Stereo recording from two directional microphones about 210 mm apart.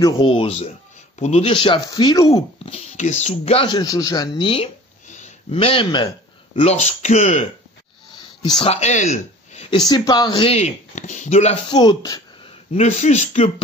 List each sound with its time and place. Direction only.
0.0 s speech: 20° left (ahead or behind)
2.6 s speech: 30° left (ahead or behind)
5.1 s a sound: 30° left (ahead or behind)
6.5 s speech: 30° left (ahead or behind)
8.1 s a sound: 20° left (ahead or behind)
8.6 s speech: 30° left (ahead or behind)
9.8 s speech: 20° left (ahead or behind)
11.8 s speech: 20° left (ahead or behind)
12.7 s speech: 30° left (ahead or behind)